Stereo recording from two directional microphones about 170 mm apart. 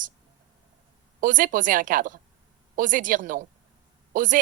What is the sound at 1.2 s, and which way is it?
Speech, 50° right (ahead or behind).